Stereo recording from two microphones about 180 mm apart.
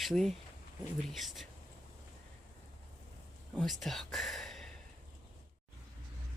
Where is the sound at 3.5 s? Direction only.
Centre (ahead or behind).